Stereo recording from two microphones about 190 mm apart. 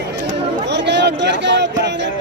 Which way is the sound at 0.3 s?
65° right (ahead or behind).